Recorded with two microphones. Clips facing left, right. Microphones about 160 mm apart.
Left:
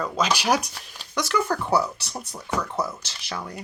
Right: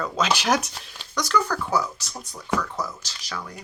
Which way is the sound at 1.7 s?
35° left (ahead or behind).